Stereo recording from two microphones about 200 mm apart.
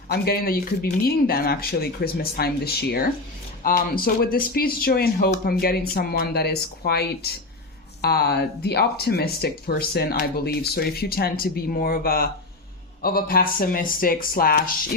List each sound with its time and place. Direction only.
0.1 s speech: 50° left (ahead or behind)